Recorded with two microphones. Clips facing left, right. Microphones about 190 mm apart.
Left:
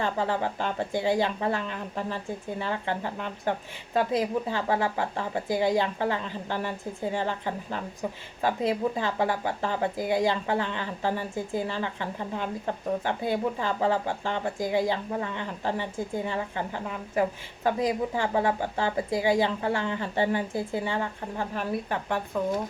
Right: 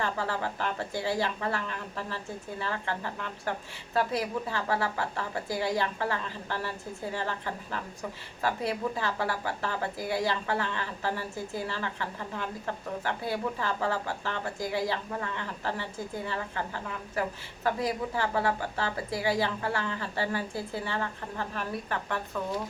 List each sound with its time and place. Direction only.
0.0 s a woman's voice: 20° left (ahead or behind)